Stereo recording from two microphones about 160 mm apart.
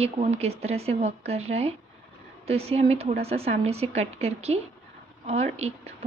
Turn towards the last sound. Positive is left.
turn(degrees=-40)  # may be behind; listen again after turning